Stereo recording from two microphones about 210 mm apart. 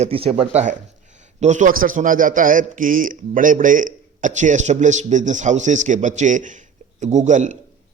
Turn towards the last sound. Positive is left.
turn(degrees=-35)  # may be behind; listen again after turning